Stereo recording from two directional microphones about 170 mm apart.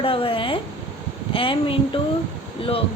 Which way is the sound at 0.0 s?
30° left (ahead or behind).